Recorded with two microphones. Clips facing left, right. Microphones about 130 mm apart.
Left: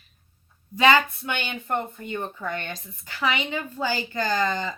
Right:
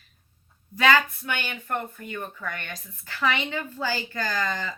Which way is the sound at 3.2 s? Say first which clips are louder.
Even; 15° left (ahead or behind).